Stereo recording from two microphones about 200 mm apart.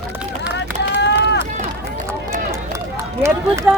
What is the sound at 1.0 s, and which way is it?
Run, 60° left (ahead or behind).